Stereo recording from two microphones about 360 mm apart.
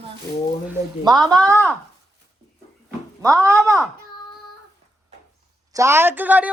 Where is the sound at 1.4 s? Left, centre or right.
Centre.